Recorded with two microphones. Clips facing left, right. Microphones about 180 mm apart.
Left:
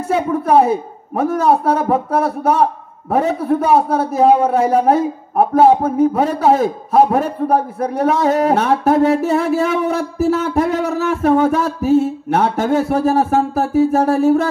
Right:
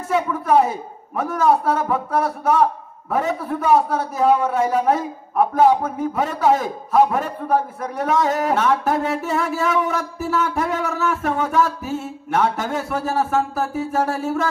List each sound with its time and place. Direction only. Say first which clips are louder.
0.1 s a man's voice: left 4 dB; 40° left (ahead or behind)